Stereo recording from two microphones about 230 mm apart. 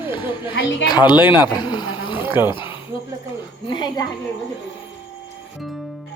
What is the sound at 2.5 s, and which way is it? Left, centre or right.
A man's voice, left.